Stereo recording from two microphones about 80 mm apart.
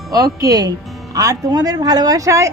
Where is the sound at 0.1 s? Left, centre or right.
Right.